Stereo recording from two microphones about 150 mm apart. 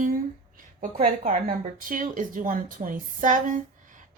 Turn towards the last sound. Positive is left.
turn(degrees=-60)  # may be behind; listen again after turning